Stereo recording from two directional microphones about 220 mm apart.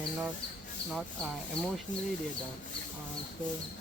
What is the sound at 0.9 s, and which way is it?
Speech, centre (ahead or behind).